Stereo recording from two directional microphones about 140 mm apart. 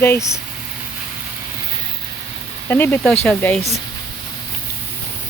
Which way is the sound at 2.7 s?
15° left (ahead or behind).